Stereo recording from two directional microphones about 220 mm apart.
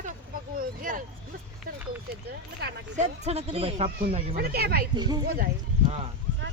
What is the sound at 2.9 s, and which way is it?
Speech, 30° right (ahead or behind).